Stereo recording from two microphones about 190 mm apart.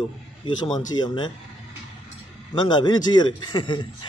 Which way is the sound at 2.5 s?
25° left (ahead or behind).